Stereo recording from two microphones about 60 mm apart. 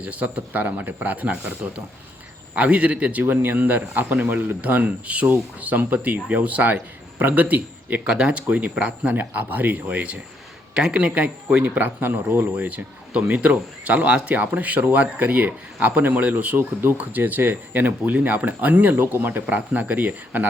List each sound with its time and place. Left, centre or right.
0.0 s speech: right
8.0 s speech: centre
9.1 s speech: right